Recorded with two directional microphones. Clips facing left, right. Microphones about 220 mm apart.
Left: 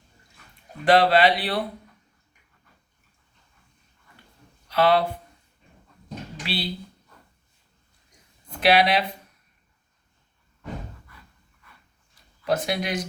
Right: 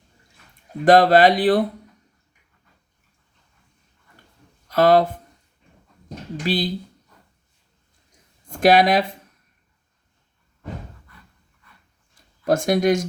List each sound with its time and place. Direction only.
0.9 s speech: 45° right (ahead or behind)
4.7 s speech: 45° right (ahead or behind)
6.4 s speech: 45° right (ahead or behind)
8.4 s speech: 50° right (ahead or behind)
12.1 s a sound: 50° right (ahead or behind)